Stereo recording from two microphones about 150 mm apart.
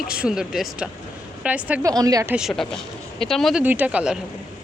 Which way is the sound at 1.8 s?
25° right (ahead or behind).